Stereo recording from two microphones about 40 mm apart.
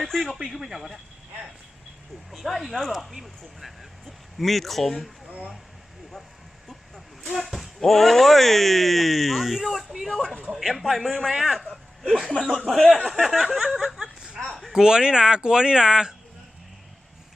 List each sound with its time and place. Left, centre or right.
0.0 s speech: centre
0.5 s speech: centre
2.4 s speech: centre
6.7 s a sound: centre
7.3 s basketball bounce: centre
7.8 s speech: centre
11.7 s speech: centre
12.3 s speech: centre